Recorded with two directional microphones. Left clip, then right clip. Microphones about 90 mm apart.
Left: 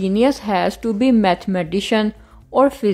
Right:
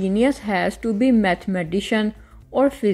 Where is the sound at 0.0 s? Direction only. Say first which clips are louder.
Left 3 dB; 30° left (ahead or behind).